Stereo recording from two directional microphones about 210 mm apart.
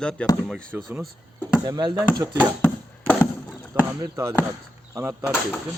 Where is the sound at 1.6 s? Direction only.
20° right (ahead or behind).